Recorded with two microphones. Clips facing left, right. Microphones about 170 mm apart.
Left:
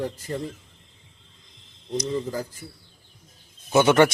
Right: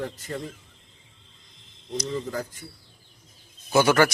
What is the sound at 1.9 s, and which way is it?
Speech, 10° left (ahead or behind).